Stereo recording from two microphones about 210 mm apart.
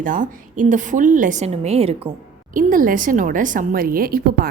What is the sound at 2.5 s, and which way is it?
A woman's voice, 40° right (ahead or behind).